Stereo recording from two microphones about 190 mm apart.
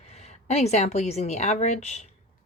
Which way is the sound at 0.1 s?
35° left (ahead or behind).